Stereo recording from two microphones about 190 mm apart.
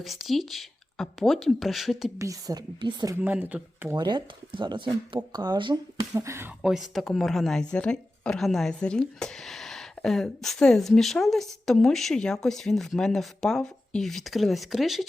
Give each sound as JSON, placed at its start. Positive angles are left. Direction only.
{"t": 0.0, "sound": "a woman's voice", "side_deg": 0}
{"t": 2.1, "sound": "a woman's voice", "side_deg": -15}
{"t": 3.2, "sound": "a woman's voice", "side_deg": -10}
{"t": 3.9, "sound": "a woman's voice", "side_deg": -25}
{"t": 6.6, "sound": "a woman's voice", "side_deg": -5}